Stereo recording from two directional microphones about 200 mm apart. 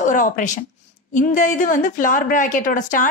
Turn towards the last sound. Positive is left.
turn(degrees=40)  # may be behind; listen again after turning